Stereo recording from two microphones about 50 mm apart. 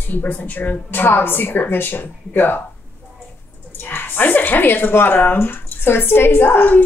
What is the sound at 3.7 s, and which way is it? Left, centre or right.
A woman's voice, left.